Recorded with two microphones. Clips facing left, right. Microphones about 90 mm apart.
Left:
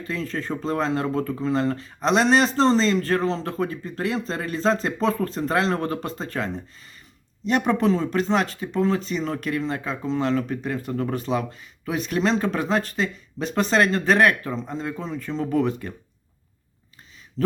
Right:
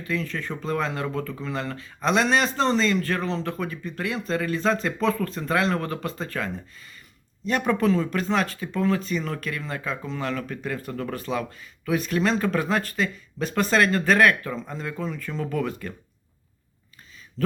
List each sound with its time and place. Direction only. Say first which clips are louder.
0.1 s speech: left 1 dB; 30° left (ahead or behind)